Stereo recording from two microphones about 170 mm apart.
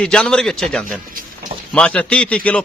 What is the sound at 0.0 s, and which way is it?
A man's voice, 5° left (ahead or behind).